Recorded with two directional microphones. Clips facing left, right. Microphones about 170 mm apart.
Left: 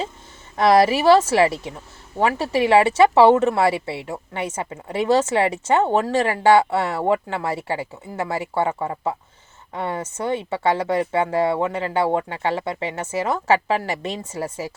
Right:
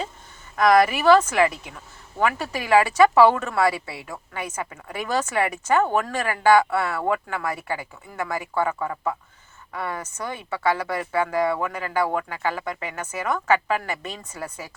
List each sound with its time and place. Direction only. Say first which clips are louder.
0.5 s speech: left 2 dB; 30° left (ahead or behind)